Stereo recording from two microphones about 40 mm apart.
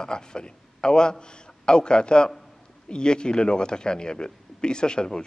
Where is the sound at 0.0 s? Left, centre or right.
Centre.